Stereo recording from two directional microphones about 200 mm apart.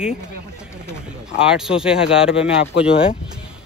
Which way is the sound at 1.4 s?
5° right (ahead or behind).